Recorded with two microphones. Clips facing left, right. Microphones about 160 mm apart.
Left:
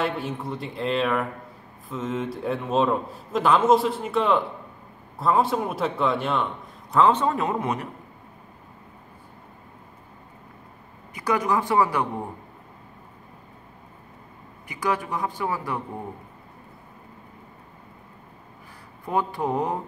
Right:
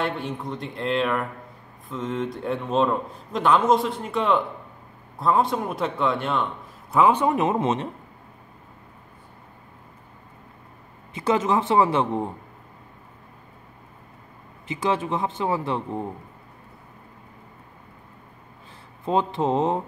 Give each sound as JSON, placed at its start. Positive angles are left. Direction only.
{"t": 0.0, "sound": "a man's voice", "side_deg": 0}
{"t": 7.0, "sound": "speech", "side_deg": -10}
{"t": 11.1, "sound": "speech", "side_deg": -25}
{"t": 14.7, "sound": "speech", "side_deg": -25}
{"t": 19.0, "sound": "speech", "side_deg": -20}